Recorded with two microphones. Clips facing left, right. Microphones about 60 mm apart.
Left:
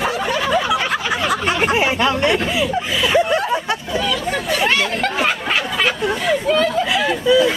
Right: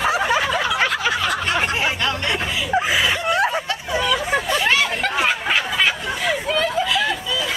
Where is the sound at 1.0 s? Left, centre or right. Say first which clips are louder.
Left 2 dB; centre.